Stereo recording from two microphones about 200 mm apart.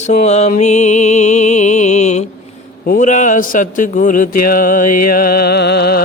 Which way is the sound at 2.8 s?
40° left (ahead or behind).